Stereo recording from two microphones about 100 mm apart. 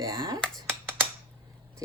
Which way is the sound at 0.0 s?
50° right (ahead or behind).